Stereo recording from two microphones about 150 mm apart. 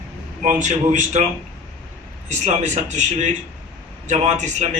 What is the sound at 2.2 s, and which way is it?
A man's voice, 50° right (ahead or behind).